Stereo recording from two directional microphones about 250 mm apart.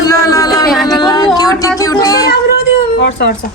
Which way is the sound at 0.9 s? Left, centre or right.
Centre.